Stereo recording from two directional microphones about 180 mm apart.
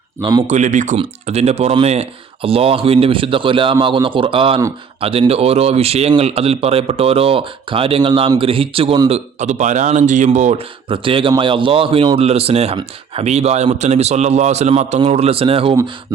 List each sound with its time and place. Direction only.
0.2 s speech: 25° right (ahead or behind)
0.5 s speech: 45° right (ahead or behind)
10.8 s speech: 30° right (ahead or behind)